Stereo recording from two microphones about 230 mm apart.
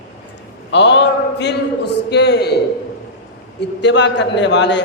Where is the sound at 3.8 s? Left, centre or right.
Left.